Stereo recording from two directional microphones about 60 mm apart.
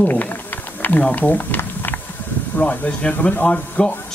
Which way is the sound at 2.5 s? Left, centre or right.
Left.